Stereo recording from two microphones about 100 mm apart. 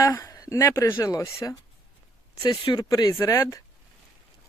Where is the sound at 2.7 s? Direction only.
40° left (ahead or behind).